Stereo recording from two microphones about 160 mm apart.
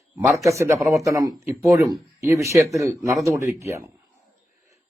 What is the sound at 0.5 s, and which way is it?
A man's voice, 20° right (ahead or behind).